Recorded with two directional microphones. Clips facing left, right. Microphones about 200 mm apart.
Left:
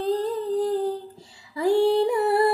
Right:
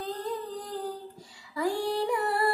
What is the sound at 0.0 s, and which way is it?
Humming, 25° left (ahead or behind).